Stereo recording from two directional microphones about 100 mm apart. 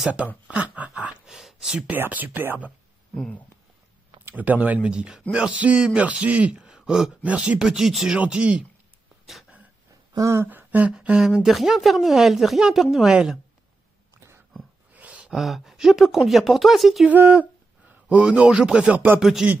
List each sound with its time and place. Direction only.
0.0 s a man's voice: 10° right (ahead or behind)
0.5 s a sound: 15° right (ahead or behind)
1.9 s a man's voice: 15° right (ahead or behind)
3.2 s speech: 10° left (ahead or behind)
4.3 s a man's voice: 15° right (ahead or behind)
10.1 s speech: 30° right (ahead or behind); by 13.4 s 5° right (ahead or behind)
14.9 s a sound: 15° right (ahead or behind)
15.3 s speech: centre (ahead or behind)
17.1 s speech: 20° right (ahead or behind)